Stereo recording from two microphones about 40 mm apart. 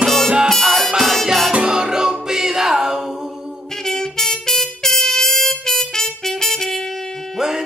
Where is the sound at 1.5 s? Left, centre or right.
Right.